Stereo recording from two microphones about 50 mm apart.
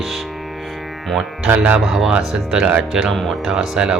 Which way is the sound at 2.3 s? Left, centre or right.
Centre.